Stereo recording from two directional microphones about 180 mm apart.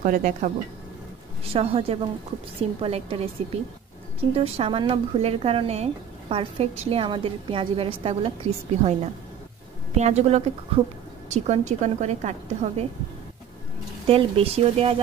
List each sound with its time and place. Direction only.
0.0 s speech: 45° right (ahead or behind)
1.4 s speech: 35° right (ahead or behind)
4.4 s speech: 35° right (ahead or behind)
9.9 s speech: 40° right (ahead or behind)
14.0 s speech: 30° right (ahead or behind)